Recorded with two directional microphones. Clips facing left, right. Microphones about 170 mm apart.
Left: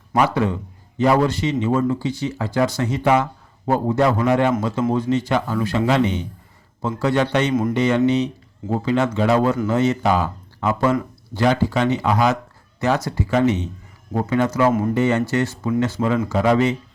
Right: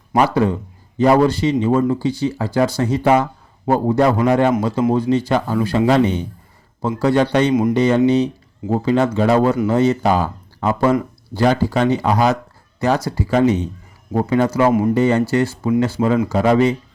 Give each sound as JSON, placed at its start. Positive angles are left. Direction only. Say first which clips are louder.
{"t": 0.2, "sound": "speech", "louder": "right 3 dB", "side_deg": -35}